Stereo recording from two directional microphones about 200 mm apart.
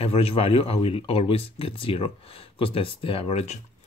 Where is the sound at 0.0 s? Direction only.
30° left (ahead or behind).